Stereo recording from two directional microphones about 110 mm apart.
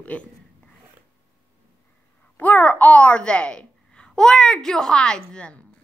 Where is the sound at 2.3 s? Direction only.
15° left (ahead or behind).